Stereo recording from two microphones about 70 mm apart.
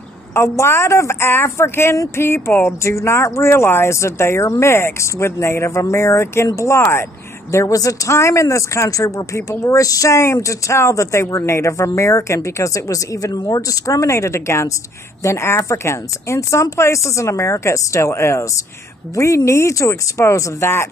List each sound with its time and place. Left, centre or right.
0.3 s speech: left
7.5 s speech: left